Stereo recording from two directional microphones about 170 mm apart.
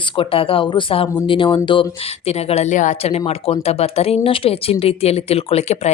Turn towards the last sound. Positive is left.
turn(degrees=40)  # may be behind; listen again after turning